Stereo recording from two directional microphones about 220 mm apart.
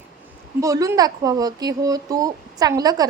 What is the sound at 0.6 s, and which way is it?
A woman's voice, 15° right (ahead or behind).